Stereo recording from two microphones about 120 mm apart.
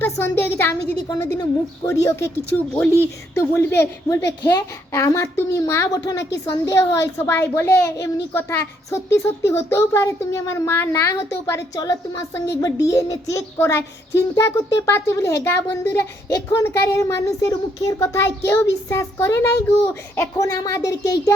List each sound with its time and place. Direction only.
0.0 s a woman's voice: 20° left (ahead or behind)